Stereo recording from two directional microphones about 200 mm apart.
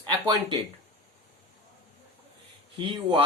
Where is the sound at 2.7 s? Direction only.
25° right (ahead or behind).